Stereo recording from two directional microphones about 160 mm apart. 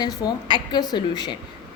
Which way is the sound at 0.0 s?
25° left (ahead or behind).